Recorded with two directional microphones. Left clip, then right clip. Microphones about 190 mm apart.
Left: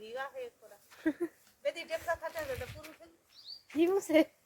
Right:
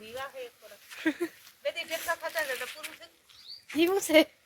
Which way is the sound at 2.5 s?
5° left (ahead or behind).